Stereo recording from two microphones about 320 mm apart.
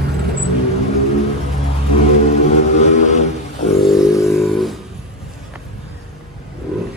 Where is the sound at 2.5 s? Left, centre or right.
Left.